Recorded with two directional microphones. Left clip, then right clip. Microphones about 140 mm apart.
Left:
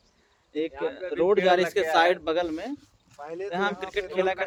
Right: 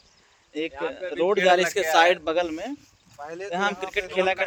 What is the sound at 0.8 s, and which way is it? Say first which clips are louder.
Speech: right 1 dB; 20° right (ahead or behind).